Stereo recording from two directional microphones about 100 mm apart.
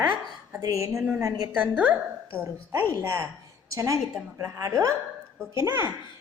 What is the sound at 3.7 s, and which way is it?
A woman's voice, 30° right (ahead or behind).